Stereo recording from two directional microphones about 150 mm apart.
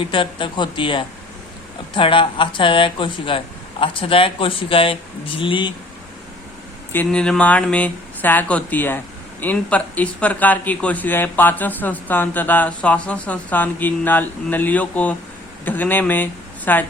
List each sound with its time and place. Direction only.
0.0 s speech: 35° left (ahead or behind)
6.9 s speech: 10° left (ahead or behind)